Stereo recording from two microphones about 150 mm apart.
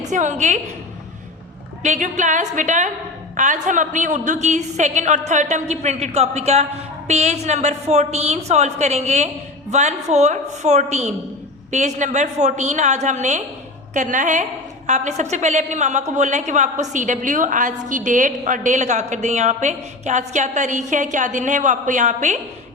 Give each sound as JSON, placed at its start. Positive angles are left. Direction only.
{"t": 0.0, "sound": "a woman's voice", "side_deg": -55}
{"t": 1.8, "sound": "a woman's voice", "side_deg": -55}